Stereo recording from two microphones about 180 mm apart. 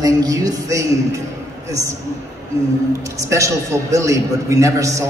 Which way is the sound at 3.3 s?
15° right (ahead or behind).